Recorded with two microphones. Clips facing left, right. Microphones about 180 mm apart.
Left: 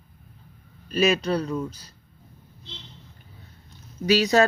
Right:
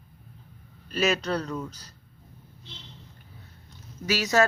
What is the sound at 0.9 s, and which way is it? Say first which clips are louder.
Speech: left 4 dB; 15° left (ahead or behind).